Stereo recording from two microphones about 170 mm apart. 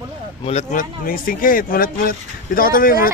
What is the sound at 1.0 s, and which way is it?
Speech, 55° left (ahead or behind).